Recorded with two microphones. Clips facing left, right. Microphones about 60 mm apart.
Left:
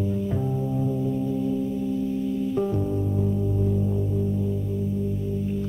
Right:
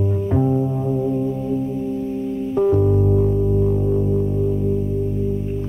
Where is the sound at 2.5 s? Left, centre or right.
Right.